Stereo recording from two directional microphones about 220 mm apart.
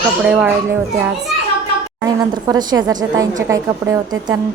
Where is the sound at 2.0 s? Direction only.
15° right (ahead or behind).